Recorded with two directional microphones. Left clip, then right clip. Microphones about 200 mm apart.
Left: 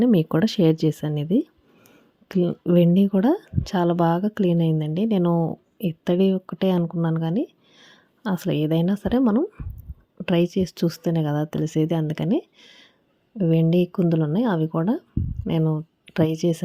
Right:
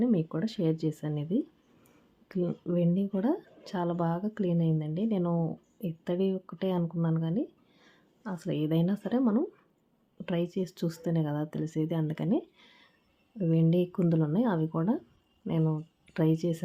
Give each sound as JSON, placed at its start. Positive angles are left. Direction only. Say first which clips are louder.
{"t": 0.0, "sound": "speech", "louder": "left 10 dB", "side_deg": 40}